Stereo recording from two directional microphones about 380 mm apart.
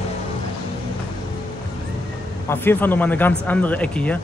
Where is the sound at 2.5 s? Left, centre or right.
Centre.